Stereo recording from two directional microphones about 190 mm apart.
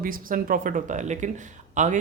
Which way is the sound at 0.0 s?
45° right (ahead or behind).